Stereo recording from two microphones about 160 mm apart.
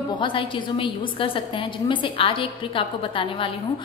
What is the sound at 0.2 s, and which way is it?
A woman's voice, 30° left (ahead or behind).